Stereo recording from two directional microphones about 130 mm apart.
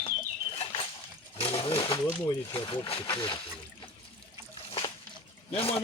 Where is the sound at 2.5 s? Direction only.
40° left (ahead or behind).